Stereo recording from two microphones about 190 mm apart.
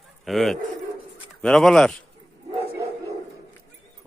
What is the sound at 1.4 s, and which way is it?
Speech, 5° left (ahead or behind).